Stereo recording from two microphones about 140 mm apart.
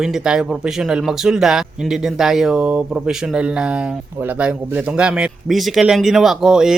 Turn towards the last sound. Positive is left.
turn(degrees=-5)  # may be behind; listen again after turning